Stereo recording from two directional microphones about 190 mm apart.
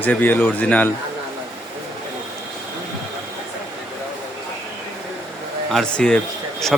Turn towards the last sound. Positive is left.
turn(degrees=0)  # may be behind; listen again after turning